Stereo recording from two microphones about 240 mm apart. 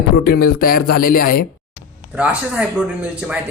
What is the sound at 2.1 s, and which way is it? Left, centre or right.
Speech, centre.